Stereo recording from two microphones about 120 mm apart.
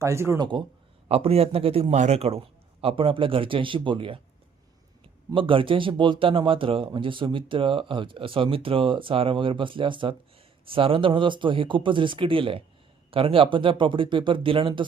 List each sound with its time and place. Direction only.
0.0 s speech: 25° right (ahead or behind)
0.3 s speech: 40° right (ahead or behind)
1.0 s speech: 55° right (ahead or behind)
2.0 s a man's voice: 65° right (ahead or behind); by 14.8 s 45° right (ahead or behind)